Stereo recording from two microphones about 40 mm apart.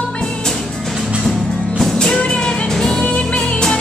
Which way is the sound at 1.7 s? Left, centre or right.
Centre.